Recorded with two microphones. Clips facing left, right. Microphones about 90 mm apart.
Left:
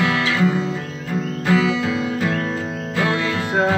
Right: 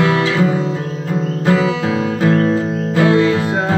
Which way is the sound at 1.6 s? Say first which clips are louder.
Right 3 dB; 50° right (ahead or behind).